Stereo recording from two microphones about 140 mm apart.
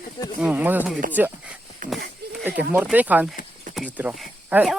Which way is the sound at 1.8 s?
75° right (ahead or behind).